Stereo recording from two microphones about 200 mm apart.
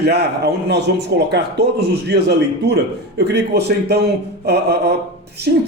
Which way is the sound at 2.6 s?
55° right (ahead or behind).